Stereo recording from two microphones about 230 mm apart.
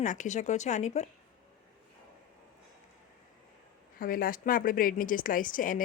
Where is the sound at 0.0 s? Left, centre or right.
Left.